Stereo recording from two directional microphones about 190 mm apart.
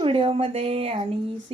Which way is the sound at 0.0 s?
30° right (ahead or behind).